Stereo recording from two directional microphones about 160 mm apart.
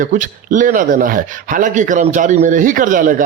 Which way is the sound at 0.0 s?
55° right (ahead or behind).